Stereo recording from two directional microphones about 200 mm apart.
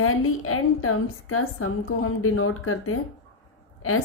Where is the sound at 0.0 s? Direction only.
90° left.